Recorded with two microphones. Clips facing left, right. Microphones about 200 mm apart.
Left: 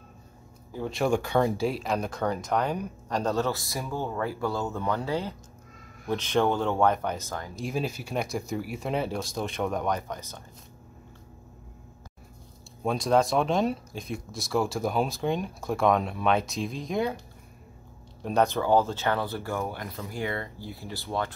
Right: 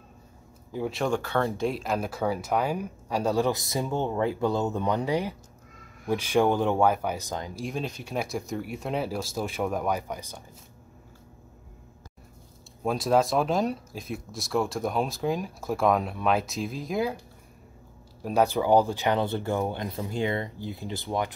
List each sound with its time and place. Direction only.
0.7 s speech: 5° right (ahead or behind)
1.0 s speech: 10° left (ahead or behind)
1.6 s speech: centre (ahead or behind); by 7.6 s 15° right (ahead or behind)
7.6 s speech: 5° left (ahead or behind); by 10.4 s 10° right (ahead or behind)
12.8 s speech: 5° right (ahead or behind)
18.2 s speech: 5° right (ahead or behind)